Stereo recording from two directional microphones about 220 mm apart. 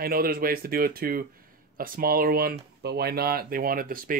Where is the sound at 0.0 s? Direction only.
40° right (ahead or behind).